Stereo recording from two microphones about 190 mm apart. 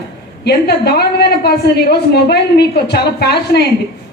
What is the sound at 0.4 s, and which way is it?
A woman's voice, 60° left (ahead or behind).